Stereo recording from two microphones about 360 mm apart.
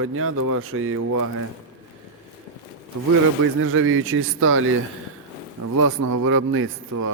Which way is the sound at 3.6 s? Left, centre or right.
Right.